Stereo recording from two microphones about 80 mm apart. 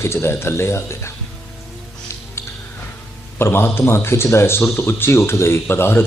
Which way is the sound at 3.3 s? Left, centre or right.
Left.